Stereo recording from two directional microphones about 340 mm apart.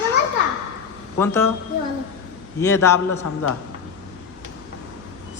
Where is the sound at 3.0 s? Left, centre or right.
Left.